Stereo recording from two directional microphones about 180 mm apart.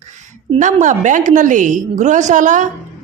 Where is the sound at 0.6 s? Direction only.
45° right (ahead or behind).